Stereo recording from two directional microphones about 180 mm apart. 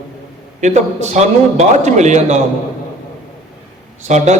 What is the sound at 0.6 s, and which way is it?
A man's voice, 40° right (ahead or behind).